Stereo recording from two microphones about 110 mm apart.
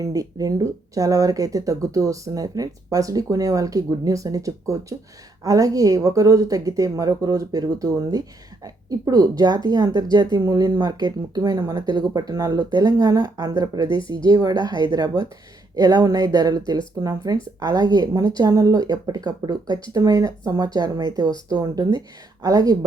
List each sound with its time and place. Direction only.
0.0 s speech: 30° right (ahead or behind)